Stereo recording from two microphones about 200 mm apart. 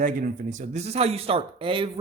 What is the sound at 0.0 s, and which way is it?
Speech, 40° right (ahead or behind).